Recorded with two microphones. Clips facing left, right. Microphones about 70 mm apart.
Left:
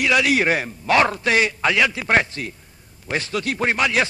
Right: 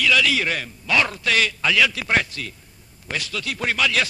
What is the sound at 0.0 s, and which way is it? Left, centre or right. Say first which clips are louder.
A man's voice: left 2 dB; left.